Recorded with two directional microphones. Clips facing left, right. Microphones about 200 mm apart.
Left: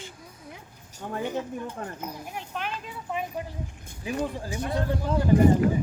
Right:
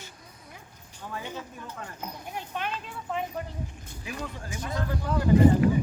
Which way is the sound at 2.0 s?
5° left (ahead or behind).